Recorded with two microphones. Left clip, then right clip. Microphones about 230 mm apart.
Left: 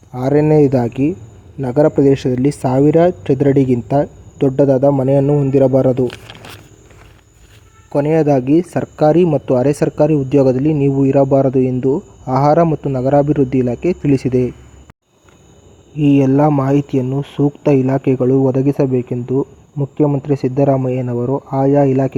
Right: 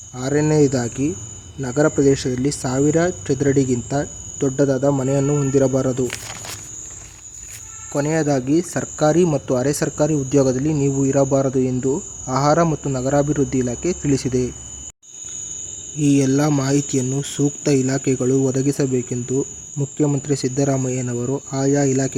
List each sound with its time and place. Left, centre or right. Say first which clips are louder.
0.1 s speech: left 6 dB; left
7.9 s speech: left 6 dB; centre
16.0 s speech: left 5 dB; centre
16.5 s cricket: left 5 dB; centre